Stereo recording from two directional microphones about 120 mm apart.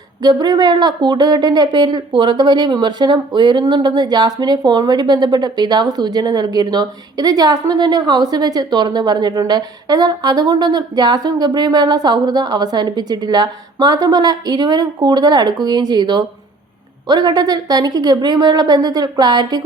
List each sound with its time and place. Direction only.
0.2 s speech: 35° right (ahead or behind)